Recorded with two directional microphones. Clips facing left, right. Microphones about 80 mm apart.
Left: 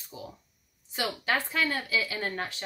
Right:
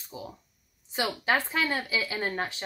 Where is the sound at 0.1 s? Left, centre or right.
Right.